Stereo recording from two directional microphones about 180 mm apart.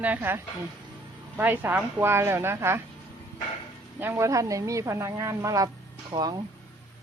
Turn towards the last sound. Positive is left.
turn(degrees=-20)  # may be behind; listen again after turning